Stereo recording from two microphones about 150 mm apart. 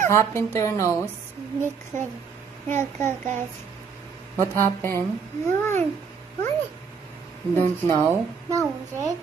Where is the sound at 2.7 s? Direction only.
15° left (ahead or behind).